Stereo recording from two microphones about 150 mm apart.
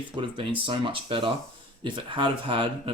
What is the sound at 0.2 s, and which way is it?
Speech, 35° right (ahead or behind).